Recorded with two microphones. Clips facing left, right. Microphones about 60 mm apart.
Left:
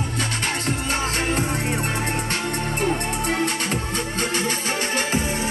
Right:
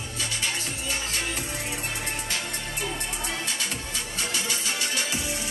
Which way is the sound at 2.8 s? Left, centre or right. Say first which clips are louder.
Left 9 dB; left.